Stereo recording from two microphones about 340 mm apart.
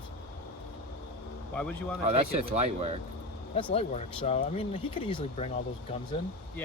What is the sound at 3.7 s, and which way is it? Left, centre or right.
Speech, centre.